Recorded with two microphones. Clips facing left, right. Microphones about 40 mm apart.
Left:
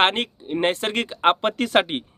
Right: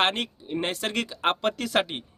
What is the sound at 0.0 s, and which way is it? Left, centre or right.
Speech, left.